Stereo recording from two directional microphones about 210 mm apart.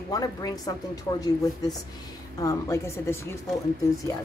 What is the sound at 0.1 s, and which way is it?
A woman's voice, 15° left (ahead or behind).